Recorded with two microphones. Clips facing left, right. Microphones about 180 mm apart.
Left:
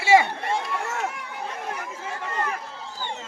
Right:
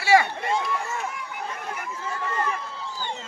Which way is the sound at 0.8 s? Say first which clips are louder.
Left 2 dB; 75° left (ahead or behind).